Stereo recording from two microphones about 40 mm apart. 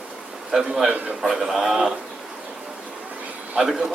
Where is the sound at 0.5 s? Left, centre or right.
Centre.